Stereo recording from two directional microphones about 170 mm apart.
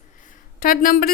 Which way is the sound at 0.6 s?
55° left (ahead or behind).